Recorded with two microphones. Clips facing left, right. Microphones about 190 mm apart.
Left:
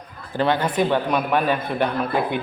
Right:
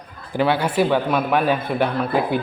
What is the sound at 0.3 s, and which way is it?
A man's voice, 10° right (ahead or behind).